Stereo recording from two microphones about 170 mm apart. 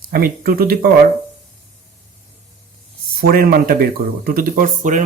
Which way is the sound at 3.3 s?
60° right (ahead or behind).